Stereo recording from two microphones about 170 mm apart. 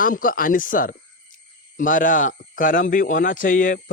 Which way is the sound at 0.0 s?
55° left (ahead or behind).